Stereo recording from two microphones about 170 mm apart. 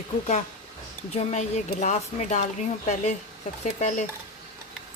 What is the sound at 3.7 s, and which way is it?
Speech, 45° left (ahead or behind).